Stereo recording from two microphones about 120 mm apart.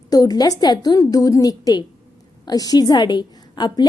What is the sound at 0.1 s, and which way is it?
A woman's voice, 30° left (ahead or behind).